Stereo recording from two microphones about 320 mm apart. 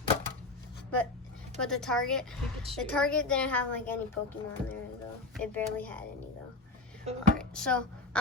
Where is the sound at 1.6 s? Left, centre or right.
Centre.